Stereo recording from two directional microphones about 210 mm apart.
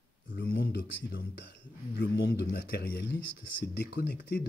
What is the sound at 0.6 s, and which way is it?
Speech, 50° left (ahead or behind).